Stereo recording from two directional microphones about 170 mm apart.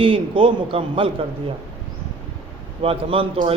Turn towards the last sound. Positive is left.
turn(degrees=-35)  # may be behind; listen again after turning